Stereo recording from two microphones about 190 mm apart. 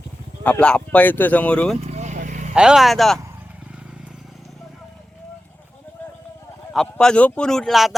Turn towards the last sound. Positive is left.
turn(degrees=0)  # may be behind; listen again after turning